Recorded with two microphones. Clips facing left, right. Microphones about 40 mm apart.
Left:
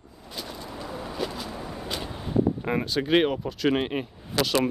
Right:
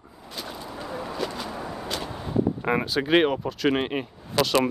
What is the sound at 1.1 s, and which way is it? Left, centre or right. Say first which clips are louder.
Vehicle: even; centre.